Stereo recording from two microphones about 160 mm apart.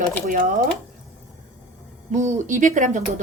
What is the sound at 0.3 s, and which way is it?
Speech, 55° right (ahead or behind).